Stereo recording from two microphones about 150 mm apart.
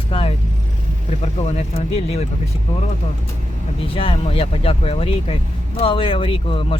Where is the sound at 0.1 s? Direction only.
40° left (ahead or behind).